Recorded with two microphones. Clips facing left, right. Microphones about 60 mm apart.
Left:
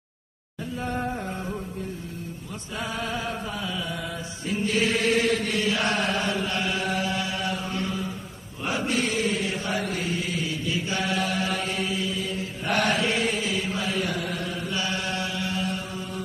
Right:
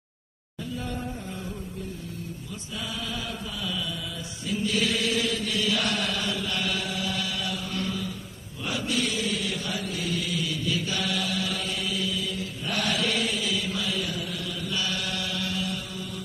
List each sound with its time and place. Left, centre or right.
2.8 s chant: left
9.8 s chant: left
10.0 s chant: left